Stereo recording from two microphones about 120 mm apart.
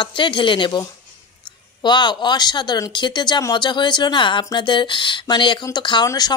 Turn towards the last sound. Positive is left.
turn(degrees=35)  # may be behind; listen again after turning